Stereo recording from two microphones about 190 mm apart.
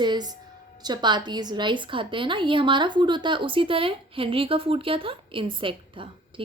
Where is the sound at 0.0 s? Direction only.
20° right (ahead or behind).